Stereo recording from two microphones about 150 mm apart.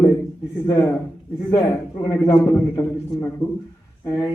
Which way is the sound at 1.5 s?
25° left (ahead or behind).